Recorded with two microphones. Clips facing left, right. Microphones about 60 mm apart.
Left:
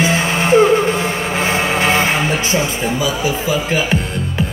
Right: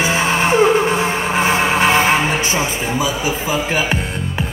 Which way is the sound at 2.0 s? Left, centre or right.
Right.